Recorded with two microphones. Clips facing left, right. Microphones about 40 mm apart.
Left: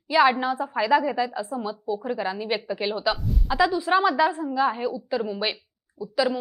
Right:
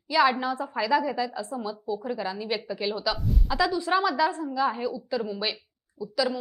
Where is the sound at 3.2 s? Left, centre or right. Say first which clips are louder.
Even; centre.